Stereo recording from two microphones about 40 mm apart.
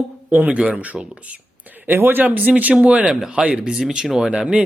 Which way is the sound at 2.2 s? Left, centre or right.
Right.